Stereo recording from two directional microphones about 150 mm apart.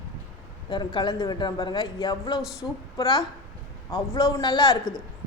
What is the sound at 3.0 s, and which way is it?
A man's voice, 25° left (ahead or behind).